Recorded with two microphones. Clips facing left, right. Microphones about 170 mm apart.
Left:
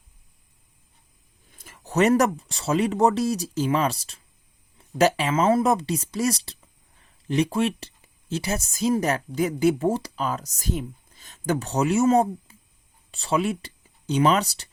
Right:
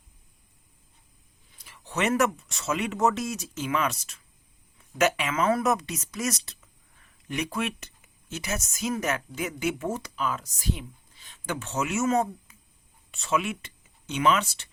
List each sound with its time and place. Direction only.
1.5 s a woman's voice: 45° left (ahead or behind)